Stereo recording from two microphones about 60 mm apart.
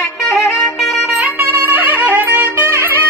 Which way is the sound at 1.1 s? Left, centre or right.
Right.